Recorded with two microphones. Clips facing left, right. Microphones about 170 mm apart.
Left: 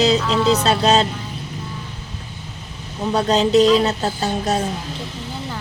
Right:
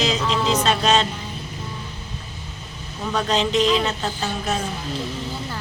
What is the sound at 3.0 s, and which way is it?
Speech, 35° left (ahead or behind).